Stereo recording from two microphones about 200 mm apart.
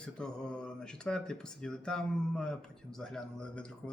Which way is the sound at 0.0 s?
5° left (ahead or behind).